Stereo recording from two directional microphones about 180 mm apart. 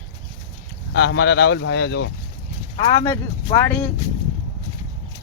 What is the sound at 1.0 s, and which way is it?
Speech, 65° left (ahead or behind).